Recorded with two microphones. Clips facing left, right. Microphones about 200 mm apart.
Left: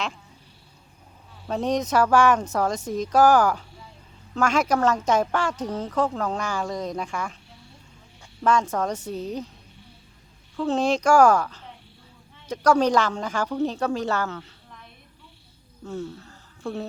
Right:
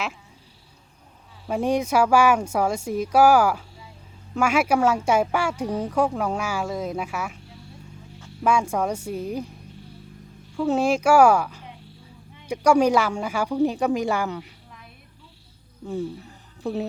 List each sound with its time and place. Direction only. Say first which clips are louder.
1.5 s a woman's voice: right 2 dB; 10° right (ahead or behind)
8.4 s a woman's voice: right 1 dB; 10° right (ahead or behind)
10.6 s a woman's voice: right 2 dB; 10° right (ahead or behind)
15.8 s speech: right 4 dB; 15° right (ahead or behind)